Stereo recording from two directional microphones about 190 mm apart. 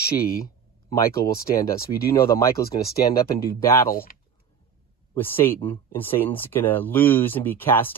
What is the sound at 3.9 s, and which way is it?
Speech, 50° left (ahead or behind).